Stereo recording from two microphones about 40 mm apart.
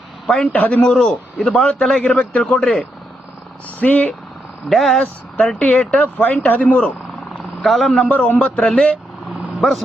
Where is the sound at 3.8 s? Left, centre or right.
Left.